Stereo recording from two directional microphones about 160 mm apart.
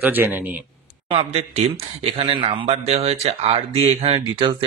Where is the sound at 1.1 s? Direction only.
40° right (ahead or behind).